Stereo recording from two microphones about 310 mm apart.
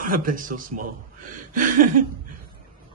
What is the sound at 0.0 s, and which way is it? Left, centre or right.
Speech, right.